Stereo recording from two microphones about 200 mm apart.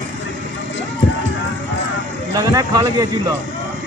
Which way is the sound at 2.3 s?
15° right (ahead or behind).